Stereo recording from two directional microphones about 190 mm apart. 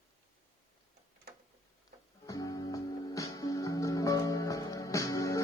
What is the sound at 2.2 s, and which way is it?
Music, 20° left (ahead or behind).